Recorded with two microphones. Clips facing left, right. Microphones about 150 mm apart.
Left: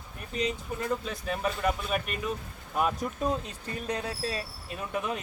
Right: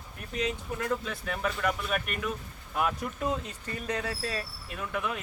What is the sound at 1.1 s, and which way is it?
Speech, 25° left (ahead or behind).